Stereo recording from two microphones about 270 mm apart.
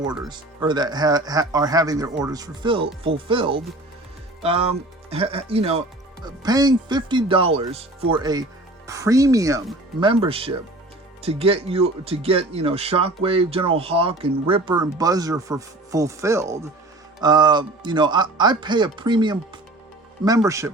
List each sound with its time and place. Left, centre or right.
0.3 s speech: centre
5.1 s speech: right